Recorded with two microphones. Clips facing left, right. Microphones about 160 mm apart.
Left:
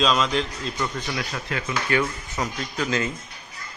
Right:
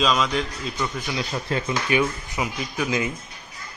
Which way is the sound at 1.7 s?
15° right (ahead or behind).